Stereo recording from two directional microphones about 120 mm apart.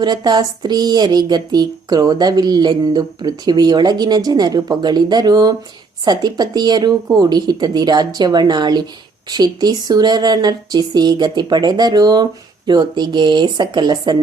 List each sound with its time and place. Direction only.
0.0 s speech: 35° right (ahead or behind)